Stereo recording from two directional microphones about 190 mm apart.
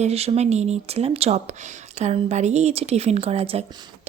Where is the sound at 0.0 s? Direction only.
35° right (ahead or behind).